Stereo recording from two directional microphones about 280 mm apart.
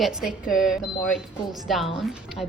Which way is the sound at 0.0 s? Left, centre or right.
Centre.